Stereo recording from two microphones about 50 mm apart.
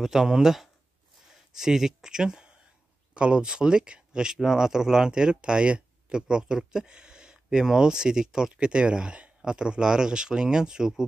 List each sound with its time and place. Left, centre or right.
0.0 s speech: centre